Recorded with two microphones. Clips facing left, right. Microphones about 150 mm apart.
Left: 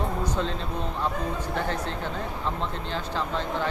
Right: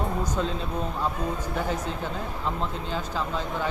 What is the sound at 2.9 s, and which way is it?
Speech, 10° right (ahead or behind).